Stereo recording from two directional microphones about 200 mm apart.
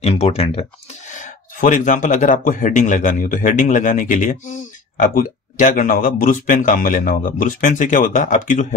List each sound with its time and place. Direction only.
0.0 s speech: 30° left (ahead or behind)